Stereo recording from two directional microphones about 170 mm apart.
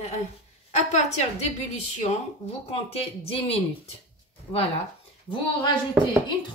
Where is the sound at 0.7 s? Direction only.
40° left (ahead or behind).